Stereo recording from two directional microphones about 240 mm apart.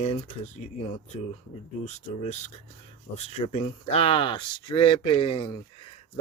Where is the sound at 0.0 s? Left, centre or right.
Left.